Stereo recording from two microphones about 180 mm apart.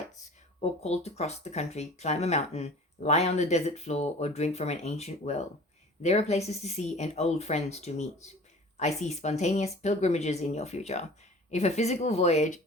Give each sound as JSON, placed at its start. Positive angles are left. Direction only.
{"t": 0.6, "sound": "speech", "side_deg": 35}